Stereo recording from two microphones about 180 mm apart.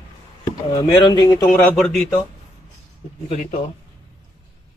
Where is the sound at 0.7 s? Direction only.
25° left (ahead or behind).